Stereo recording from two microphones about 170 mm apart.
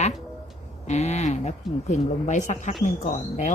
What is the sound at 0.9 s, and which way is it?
Speech, 40° left (ahead or behind).